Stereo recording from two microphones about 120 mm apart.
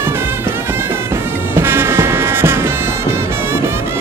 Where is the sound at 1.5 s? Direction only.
20° right (ahead or behind).